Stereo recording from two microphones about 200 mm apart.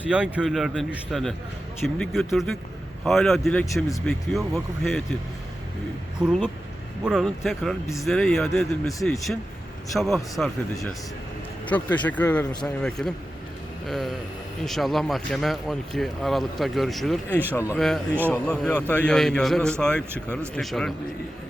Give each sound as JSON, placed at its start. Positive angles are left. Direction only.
{"t": 0.1, "sound": "speech", "side_deg": -5}
{"t": 4.0, "sound": "speech", "side_deg": 0}
{"t": 6.1, "sound": "speech", "side_deg": -5}